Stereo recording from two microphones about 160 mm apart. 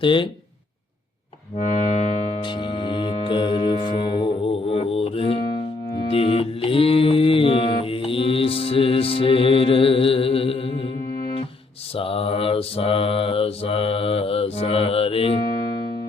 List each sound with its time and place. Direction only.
0.0 s speech: 30° left (ahead or behind)
1.5 s music: 45° left (ahead or behind)
2.4 s music: 30° left (ahead or behind)
6.0 s mantra: 35° left (ahead or behind)
11.9 s mantra: 35° left (ahead or behind)